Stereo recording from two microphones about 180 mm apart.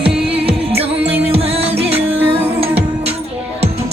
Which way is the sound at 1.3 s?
35° right (ahead or behind).